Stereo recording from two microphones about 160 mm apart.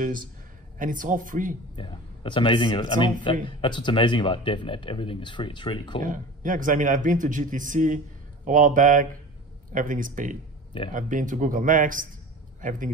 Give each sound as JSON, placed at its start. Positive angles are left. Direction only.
{"t": 0.7, "sound": "speech", "side_deg": -55}
{"t": 1.8, "sound": "speech", "side_deg": 30}
{"t": 6.0, "sound": "a man's voice", "side_deg": -55}